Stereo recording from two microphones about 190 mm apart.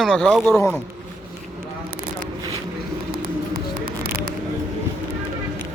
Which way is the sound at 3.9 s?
50° right (ahead or behind).